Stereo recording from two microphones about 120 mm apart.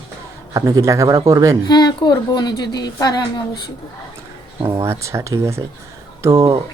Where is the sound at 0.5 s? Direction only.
25° right (ahead or behind).